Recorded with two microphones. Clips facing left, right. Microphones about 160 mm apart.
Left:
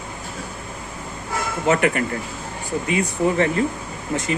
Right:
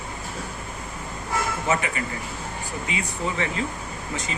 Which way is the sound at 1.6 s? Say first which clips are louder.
Left 7 dB; 60° left (ahead or behind).